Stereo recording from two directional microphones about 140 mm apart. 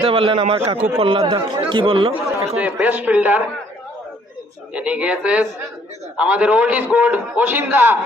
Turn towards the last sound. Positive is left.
turn(degrees=-15)  # may be behind; listen again after turning